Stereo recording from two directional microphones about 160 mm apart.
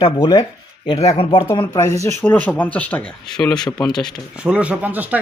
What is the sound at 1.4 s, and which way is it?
Speech, 20° left (ahead or behind).